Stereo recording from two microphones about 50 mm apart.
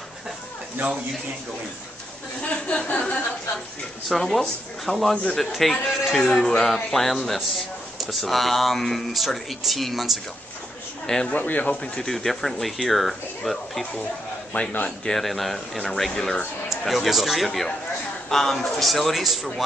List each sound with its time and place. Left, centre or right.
2.4 s speech: left
4.1 s speech: centre
5.1 s speech: centre
5.4 s speech: centre
11.2 s speech: left
11.7 s speech: centre
12.1 s speech: centre
14.5 s speech: left
15.0 s a man's voice: centre